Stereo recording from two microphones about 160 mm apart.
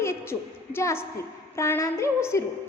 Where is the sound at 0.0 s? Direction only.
15° left (ahead or behind).